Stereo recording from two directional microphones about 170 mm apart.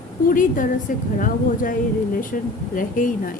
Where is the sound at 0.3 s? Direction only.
55° left (ahead or behind).